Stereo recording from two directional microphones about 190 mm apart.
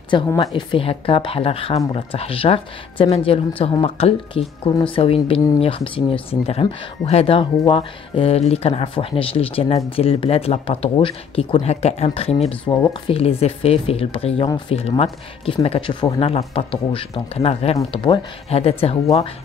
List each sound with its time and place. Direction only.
0.1 s speech: 20° left (ahead or behind)